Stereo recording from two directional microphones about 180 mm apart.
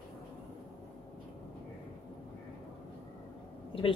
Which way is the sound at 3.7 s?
30° left (ahead or behind).